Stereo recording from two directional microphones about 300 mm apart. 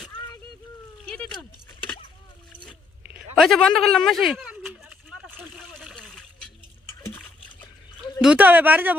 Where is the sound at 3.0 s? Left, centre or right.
Right.